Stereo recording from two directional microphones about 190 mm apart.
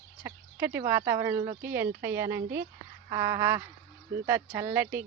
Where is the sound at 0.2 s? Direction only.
15° right (ahead or behind).